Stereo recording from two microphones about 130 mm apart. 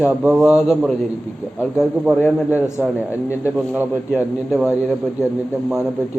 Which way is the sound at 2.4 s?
10° right (ahead or behind).